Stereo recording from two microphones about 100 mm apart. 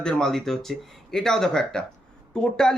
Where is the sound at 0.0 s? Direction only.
5° left (ahead or behind).